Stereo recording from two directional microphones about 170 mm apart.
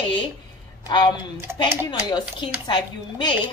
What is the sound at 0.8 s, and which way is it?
Speech, 25° left (ahead or behind).